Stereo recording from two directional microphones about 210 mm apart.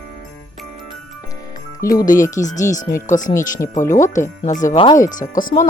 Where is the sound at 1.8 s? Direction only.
15° left (ahead or behind).